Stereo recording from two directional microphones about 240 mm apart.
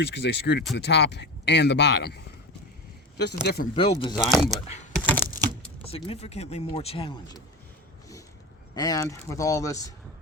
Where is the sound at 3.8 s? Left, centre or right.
Left.